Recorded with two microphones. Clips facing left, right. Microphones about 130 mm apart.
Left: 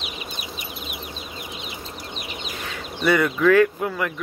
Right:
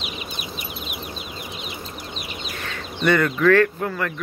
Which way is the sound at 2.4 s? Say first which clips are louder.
Even; 15° left (ahead or behind).